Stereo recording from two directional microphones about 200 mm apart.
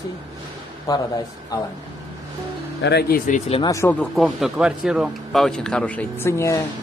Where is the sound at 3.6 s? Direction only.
15° left (ahead or behind).